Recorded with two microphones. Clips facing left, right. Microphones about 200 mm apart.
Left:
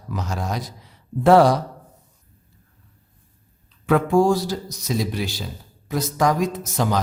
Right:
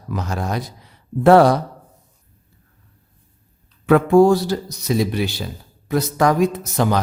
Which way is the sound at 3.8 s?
60° right (ahead or behind).